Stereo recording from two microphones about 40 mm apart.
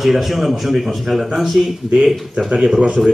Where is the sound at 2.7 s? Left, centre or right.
Right.